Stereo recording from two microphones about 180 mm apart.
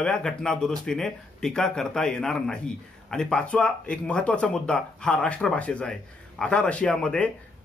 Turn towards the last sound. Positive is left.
turn(degrees=5)  # may be behind; listen again after turning